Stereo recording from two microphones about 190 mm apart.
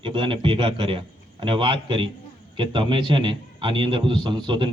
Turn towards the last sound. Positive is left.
turn(degrees=-25)  # may be behind; listen again after turning